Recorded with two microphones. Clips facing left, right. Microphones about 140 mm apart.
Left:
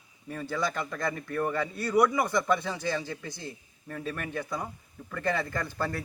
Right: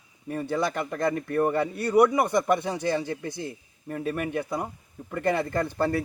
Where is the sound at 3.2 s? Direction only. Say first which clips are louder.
Right 7 dB; 55° right (ahead or behind).